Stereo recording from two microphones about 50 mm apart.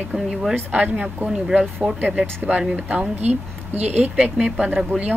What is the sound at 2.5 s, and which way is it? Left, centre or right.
Speech, right.